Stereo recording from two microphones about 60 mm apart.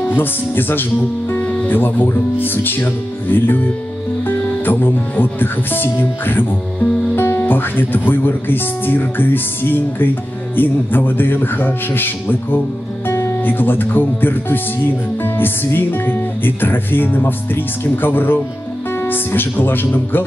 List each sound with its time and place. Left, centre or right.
0.0 s speech: left